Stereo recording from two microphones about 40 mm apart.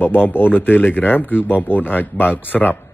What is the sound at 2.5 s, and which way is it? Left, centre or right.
Speech, left.